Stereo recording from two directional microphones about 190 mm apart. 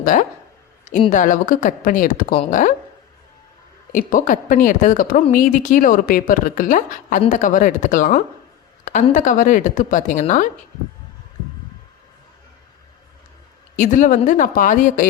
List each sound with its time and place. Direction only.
0.0 s a woman's voice: 45° left (ahead or behind)
3.9 s a woman's voice: 45° left (ahead or behind)
13.7 s a woman's voice: 40° left (ahead or behind)